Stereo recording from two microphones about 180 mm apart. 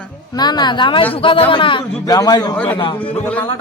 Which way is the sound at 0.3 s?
25° left (ahead or behind).